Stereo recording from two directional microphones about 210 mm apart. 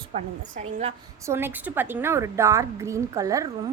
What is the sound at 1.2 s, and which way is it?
A woman's voice, 10° right (ahead or behind).